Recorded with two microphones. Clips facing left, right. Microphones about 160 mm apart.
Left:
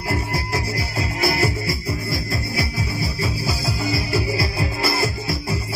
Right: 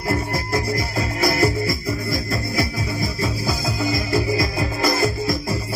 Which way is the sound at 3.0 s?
40° right (ahead or behind).